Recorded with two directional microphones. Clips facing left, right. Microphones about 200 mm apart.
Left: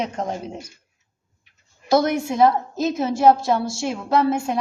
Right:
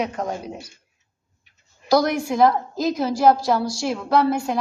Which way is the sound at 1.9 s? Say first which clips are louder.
Even; 25° left (ahead or behind).